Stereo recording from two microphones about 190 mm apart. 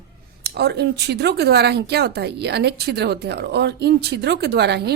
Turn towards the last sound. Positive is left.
turn(degrees=-60)  # may be behind; listen again after turning